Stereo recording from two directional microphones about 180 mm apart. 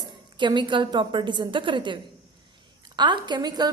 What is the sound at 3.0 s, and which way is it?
Speech, 25° right (ahead or behind).